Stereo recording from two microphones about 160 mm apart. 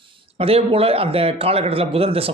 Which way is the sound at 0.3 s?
35° right (ahead or behind).